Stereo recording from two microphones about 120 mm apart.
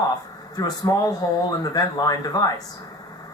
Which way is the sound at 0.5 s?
30° left (ahead or behind).